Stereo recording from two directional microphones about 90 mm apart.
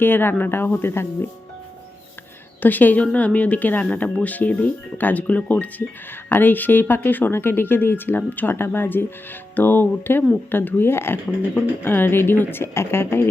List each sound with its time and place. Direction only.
0.0 s speech: 25° left (ahead or behind)
2.6 s speech: 20° left (ahead or behind)